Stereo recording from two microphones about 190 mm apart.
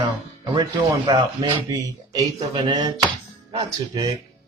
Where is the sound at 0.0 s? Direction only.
20° right (ahead or behind).